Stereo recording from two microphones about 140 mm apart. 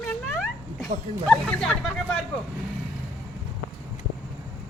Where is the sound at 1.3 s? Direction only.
5° left (ahead or behind).